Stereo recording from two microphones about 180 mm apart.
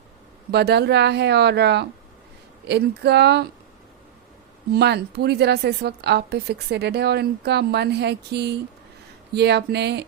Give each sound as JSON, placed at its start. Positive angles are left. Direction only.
{"t": 0.5, "sound": "speech", "side_deg": -65}
{"t": 4.7, "sound": "a woman's voice", "side_deg": -65}